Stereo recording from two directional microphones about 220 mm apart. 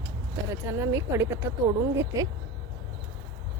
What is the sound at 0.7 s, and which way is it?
Speech, 15° right (ahead or behind).